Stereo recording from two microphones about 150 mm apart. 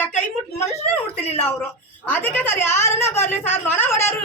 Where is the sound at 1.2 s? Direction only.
15° left (ahead or behind).